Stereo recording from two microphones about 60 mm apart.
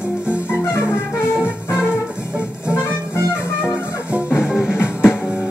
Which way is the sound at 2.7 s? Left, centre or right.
Left.